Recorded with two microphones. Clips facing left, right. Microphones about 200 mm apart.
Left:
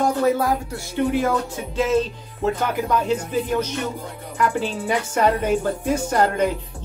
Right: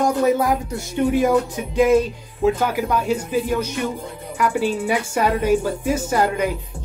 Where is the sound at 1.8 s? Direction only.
10° right (ahead or behind).